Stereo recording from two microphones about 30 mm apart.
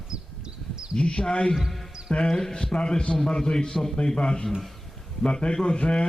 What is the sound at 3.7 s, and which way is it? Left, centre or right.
Speech, centre.